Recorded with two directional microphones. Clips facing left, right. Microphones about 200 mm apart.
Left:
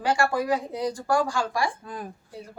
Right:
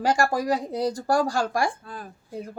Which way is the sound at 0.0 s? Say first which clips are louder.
Right 1 dB; 40° right (ahead or behind).